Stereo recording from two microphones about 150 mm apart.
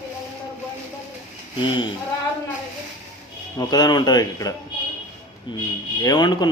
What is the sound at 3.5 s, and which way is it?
Speech, 25° left (ahead or behind).